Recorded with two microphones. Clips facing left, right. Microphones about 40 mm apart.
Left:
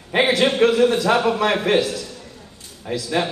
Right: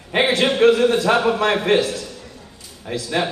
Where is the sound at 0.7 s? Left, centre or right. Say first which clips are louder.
Right 2 dB; centre.